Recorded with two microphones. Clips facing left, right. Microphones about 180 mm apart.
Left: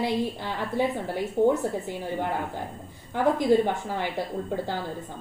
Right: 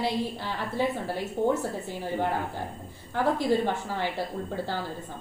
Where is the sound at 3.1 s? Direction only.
15° left (ahead or behind).